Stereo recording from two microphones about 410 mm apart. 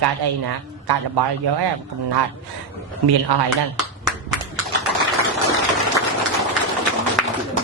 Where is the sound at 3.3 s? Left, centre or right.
Right.